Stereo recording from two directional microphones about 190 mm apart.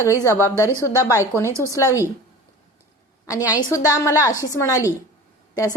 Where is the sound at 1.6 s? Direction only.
15° left (ahead or behind).